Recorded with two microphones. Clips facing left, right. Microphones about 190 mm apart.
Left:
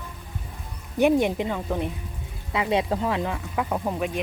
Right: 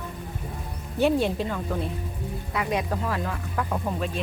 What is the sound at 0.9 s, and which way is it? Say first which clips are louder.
Speech: left 2 dB; 15° left (ahead or behind).